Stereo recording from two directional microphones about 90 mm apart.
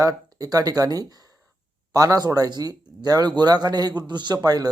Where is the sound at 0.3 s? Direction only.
45° right (ahead or behind).